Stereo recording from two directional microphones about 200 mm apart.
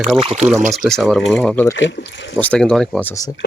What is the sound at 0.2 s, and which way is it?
Speech, 30° right (ahead or behind).